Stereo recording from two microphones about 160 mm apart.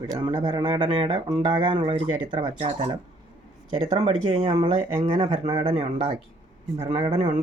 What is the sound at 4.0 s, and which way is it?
Speech, 40° right (ahead or behind).